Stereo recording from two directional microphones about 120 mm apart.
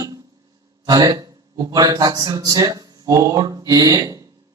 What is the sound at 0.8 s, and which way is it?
A man's voice, 30° right (ahead or behind).